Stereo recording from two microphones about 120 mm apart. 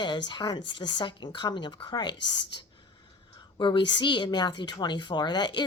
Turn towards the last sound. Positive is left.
turn(degrees=40)  # may be behind; listen again after turning